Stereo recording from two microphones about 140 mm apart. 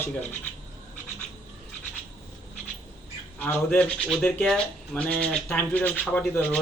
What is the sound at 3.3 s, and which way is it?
Speech, 15° left (ahead or behind).